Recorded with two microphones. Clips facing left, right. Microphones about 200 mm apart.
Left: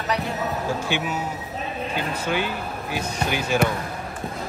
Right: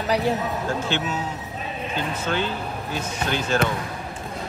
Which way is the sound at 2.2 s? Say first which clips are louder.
Right 1 dB; 10° left (ahead or behind).